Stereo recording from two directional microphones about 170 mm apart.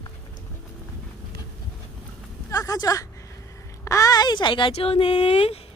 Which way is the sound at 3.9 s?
20° left (ahead or behind).